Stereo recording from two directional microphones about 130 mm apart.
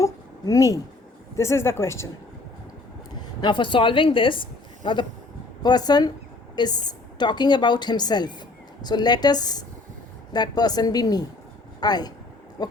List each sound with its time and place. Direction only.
0.0 s a sound: 25° left (ahead or behind)
1.4 s speech: 20° left (ahead or behind)
3.4 s a woman's voice: 40° left (ahead or behind)
12.6 s pig: 30° left (ahead or behind)